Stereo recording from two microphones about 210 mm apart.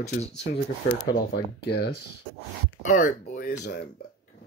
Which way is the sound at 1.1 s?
50° left (ahead or behind).